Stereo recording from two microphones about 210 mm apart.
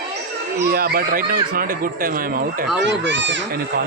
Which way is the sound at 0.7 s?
45° right (ahead or behind).